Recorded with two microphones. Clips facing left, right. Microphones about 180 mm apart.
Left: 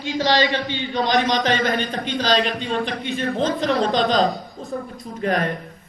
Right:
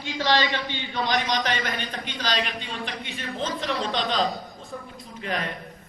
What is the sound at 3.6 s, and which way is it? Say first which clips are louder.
A man's voice: left 8 dB; 40° left (ahead or behind).